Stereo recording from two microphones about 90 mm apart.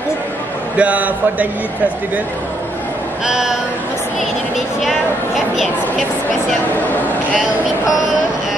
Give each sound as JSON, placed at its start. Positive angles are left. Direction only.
{"t": 0.7, "sound": "a man's voice", "side_deg": -15}
{"t": 3.3, "sound": "a man's voice", "side_deg": -5}
{"t": 4.8, "sound": "a woman's voice", "side_deg": 0}